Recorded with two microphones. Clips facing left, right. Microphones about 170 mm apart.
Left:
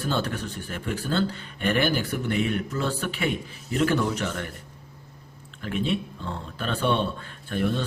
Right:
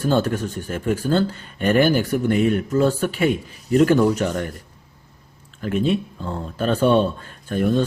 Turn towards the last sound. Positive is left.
turn(degrees=-45)  # may be behind; listen again after turning